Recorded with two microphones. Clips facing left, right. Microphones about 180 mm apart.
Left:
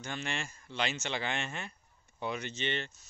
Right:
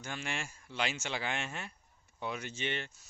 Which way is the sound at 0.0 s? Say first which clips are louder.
Left 2 dB; 5° right (ahead or behind).